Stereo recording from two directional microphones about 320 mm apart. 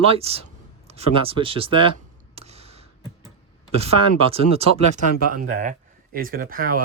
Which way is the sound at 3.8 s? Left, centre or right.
Centre.